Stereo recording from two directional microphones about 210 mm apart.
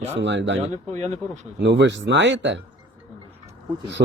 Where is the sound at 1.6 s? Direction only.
55° right (ahead or behind).